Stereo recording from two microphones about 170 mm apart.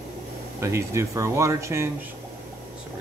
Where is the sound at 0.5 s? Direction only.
15° right (ahead or behind).